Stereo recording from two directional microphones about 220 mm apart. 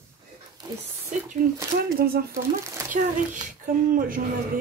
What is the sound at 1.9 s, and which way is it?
Speech, 45° right (ahead or behind).